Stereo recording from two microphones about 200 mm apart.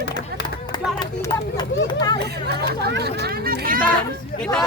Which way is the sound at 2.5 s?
55° right (ahead or behind).